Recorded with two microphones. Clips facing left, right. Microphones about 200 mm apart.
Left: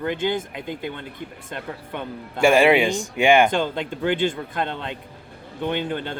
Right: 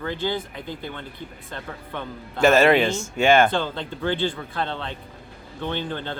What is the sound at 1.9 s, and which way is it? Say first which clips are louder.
Speech: left 1 dB; 15° left (ahead or behind).